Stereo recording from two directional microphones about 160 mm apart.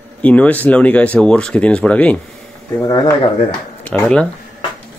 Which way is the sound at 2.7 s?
20° left (ahead or behind).